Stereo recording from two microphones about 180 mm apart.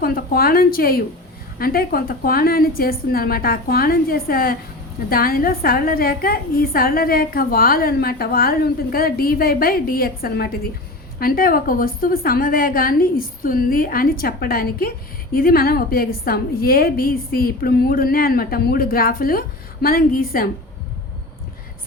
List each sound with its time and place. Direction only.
0.0 s a woman's voice: 55° left (ahead or behind)